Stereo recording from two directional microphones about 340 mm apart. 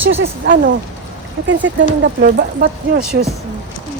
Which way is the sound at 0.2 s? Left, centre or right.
Right.